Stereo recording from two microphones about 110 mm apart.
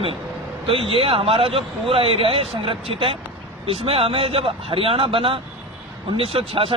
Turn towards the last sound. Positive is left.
turn(degrees=-55)  # may be behind; listen again after turning